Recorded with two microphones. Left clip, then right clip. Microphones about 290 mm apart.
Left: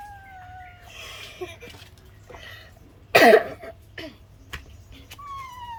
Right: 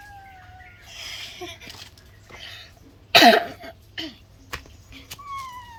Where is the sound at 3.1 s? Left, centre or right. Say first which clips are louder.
Even; centre.